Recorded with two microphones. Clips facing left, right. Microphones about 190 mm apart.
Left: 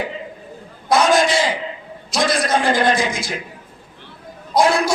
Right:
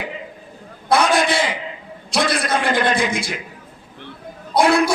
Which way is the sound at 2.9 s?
60° right (ahead or behind).